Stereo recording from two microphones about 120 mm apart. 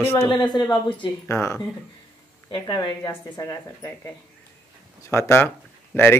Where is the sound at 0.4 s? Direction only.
35° left (ahead or behind).